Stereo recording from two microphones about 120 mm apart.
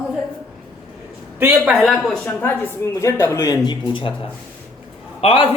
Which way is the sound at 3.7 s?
45° left (ahead or behind).